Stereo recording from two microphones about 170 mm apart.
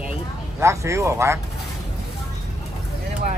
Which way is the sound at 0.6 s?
15° right (ahead or behind).